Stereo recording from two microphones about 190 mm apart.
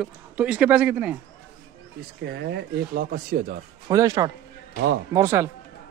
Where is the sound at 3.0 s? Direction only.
50° right (ahead or behind).